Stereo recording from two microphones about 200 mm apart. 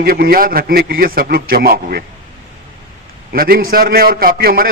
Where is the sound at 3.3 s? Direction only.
50° right (ahead or behind).